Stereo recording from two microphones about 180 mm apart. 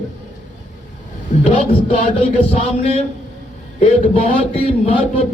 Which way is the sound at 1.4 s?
35° left (ahead or behind).